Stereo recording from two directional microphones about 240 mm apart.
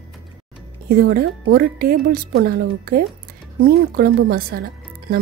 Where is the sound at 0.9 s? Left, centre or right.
Right.